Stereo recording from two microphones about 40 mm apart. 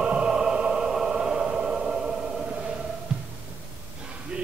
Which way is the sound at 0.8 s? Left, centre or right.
Centre.